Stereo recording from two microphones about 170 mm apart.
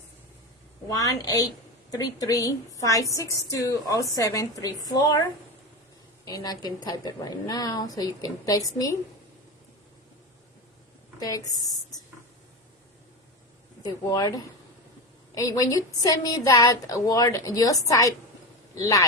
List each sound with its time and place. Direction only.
0.9 s a woman's voice: 20° left (ahead or behind)
11.2 s a woman's voice: 20° left (ahead or behind)
13.8 s a woman's voice: 25° left (ahead or behind)